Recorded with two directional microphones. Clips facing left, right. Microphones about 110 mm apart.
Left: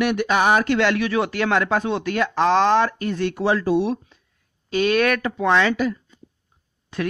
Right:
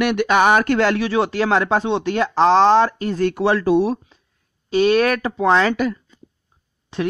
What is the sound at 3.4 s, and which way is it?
Speech, 75° right (ahead or behind).